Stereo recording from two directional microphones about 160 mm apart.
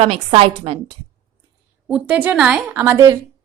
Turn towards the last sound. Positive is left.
turn(degrees=-20)  # may be behind; listen again after turning